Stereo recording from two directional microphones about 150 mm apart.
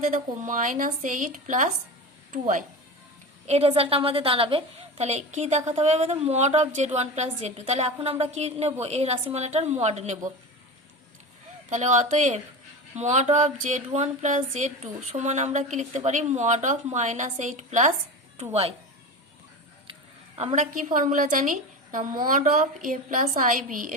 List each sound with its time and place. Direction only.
0.0 s speech: 60° right (ahead or behind)
3.4 s a woman's voice: 45° right (ahead or behind)
11.7 s a woman's voice: 50° right (ahead or behind)
19.9 s a sound: 35° right (ahead or behind)
20.6 s speech: 60° right (ahead or behind)